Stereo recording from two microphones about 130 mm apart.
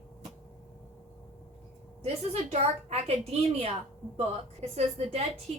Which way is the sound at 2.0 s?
55° right (ahead or behind).